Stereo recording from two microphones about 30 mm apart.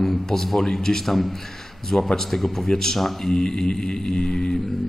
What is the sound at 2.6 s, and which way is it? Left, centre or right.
Speech, centre.